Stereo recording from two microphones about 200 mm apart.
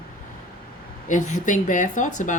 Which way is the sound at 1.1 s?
40° left (ahead or behind).